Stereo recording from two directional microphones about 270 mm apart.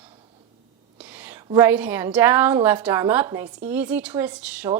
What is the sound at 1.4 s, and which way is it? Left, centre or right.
A woman's voice, centre.